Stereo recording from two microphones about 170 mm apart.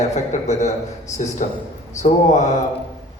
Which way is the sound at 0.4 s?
40° left (ahead or behind).